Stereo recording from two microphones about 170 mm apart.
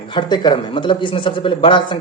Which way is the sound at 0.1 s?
25° left (ahead or behind).